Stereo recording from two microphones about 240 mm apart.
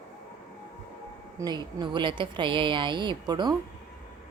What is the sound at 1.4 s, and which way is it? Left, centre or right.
A woman's voice, centre.